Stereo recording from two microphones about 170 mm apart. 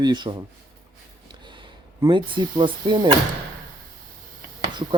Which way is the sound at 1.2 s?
25° right (ahead or behind).